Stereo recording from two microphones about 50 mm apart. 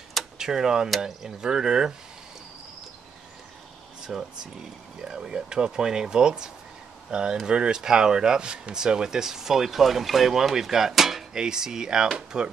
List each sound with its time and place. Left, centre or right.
0.4 s speech: centre
4.0 s speech: centre